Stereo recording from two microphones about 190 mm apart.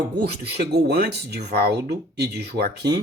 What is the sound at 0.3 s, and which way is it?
Speech, 60° right (ahead or behind).